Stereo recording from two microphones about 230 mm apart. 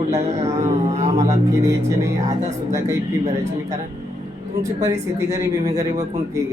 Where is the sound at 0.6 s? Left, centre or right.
Right.